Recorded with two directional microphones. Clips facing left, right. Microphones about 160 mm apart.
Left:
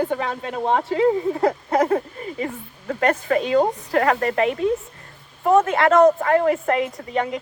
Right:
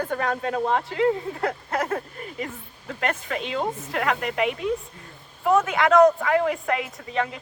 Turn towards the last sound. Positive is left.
turn(degrees=40)  # may be behind; listen again after turning